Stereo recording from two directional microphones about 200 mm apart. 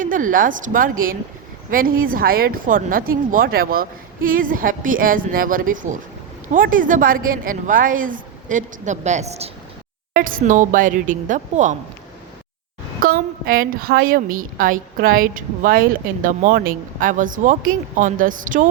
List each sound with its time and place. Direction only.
0.0 s a woman's voice: 40° right (ahead or behind)
13.0 s a woman's voice: 45° right (ahead or behind)